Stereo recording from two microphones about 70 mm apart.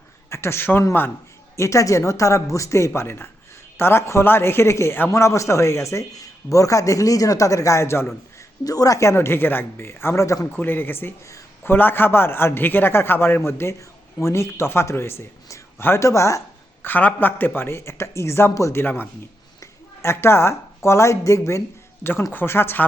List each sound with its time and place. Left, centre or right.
0.3 s a man's voice: left
1.5 s a man's voice: left
8.6 s a man's voice: left
10.4 s a man's voice: left
16.8 s a man's voice: left
22.3 s a man's voice: left